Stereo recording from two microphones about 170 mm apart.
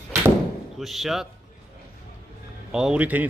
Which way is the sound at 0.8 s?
Centre (ahead or behind).